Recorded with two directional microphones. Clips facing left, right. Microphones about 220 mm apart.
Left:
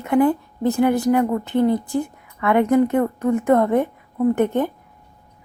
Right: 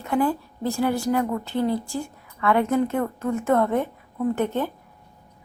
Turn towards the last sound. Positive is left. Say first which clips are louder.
# left 5 dB
turn(degrees=15)  # may be behind; listen again after turning